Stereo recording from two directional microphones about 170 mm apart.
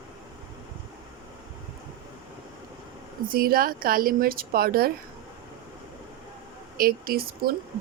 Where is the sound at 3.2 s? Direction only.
60° right (ahead or behind).